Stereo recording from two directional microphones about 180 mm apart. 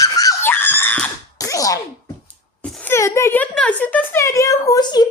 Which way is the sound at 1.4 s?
20° left (ahead or behind).